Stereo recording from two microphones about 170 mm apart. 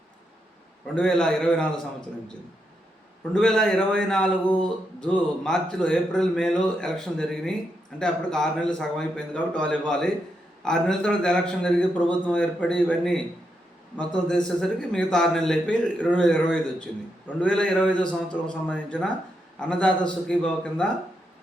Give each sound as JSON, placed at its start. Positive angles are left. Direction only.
{"t": 0.9, "sound": "a man's voice", "side_deg": 5}
{"t": 3.3, "sound": "a man's voice", "side_deg": 5}
{"t": 14.3, "sound": "a man's voice", "side_deg": 5}